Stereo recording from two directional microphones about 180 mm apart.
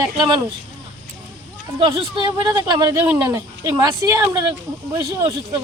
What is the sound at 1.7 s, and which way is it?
Speech, 25° right (ahead or behind).